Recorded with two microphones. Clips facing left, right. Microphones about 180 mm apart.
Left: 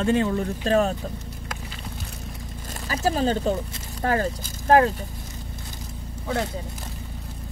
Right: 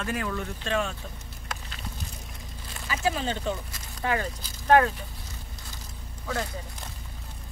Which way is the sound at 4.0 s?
45° left (ahead or behind).